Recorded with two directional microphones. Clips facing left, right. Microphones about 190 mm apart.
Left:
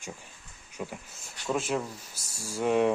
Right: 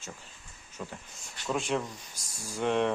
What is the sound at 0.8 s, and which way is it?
Speech, 10° left (ahead or behind).